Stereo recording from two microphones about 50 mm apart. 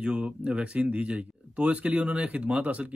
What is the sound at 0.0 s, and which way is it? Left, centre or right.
Speech, centre.